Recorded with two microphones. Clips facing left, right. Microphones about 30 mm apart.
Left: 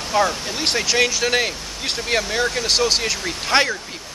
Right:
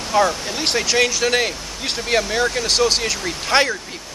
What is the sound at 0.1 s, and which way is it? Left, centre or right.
Speech, centre.